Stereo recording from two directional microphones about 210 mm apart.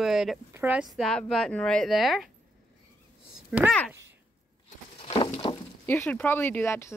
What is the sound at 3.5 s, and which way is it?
Speech, 5° right (ahead or behind).